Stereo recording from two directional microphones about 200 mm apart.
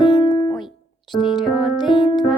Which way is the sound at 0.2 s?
30° right (ahead or behind).